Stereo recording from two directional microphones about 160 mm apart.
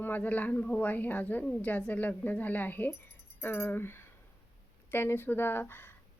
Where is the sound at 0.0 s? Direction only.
10° left (ahead or behind).